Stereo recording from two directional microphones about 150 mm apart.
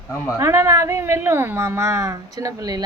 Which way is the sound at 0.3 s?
20° right (ahead or behind).